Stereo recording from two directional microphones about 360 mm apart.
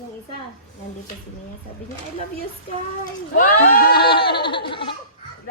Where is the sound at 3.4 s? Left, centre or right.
Left.